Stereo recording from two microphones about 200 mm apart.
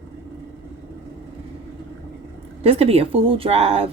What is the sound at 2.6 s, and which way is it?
Speech, 30° right (ahead or behind).